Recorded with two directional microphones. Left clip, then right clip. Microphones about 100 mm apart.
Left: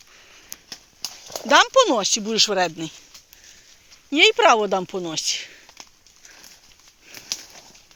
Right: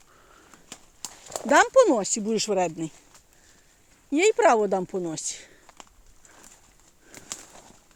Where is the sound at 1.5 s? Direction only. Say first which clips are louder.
Left 3 dB; 45° right (ahead or behind).